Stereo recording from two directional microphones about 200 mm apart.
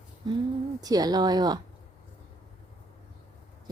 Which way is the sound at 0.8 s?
20° right (ahead or behind).